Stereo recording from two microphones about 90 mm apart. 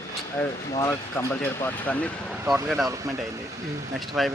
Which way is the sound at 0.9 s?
25° left (ahead or behind).